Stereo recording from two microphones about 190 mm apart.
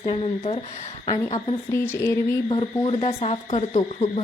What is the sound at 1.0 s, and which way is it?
A woman's voice, 20° left (ahead or behind).